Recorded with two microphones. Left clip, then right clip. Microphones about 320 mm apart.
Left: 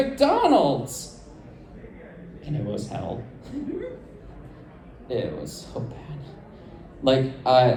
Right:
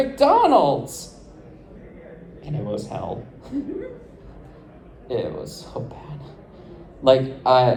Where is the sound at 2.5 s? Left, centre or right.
Centre.